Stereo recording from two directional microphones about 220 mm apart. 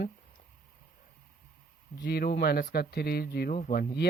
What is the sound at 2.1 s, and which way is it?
Speech, 45° left (ahead or behind).